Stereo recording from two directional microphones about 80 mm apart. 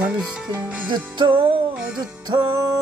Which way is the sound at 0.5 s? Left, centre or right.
Centre.